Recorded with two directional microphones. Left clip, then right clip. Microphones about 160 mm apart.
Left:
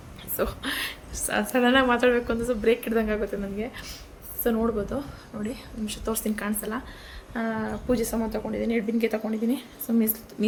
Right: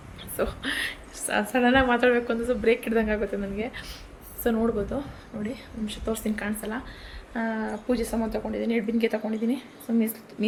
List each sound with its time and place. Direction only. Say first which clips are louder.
0.3 s a woman's voice: even; 10° left (ahead or behind)
4.9 s a woman's voice: even; 15° left (ahead or behind)